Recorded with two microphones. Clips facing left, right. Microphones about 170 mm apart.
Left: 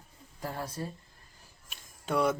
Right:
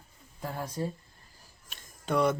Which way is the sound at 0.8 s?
20° right (ahead or behind).